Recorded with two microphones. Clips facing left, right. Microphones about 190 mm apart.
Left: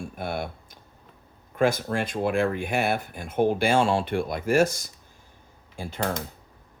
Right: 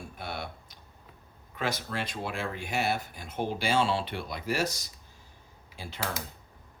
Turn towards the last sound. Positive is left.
turn(degrees=50)  # may be behind; listen again after turning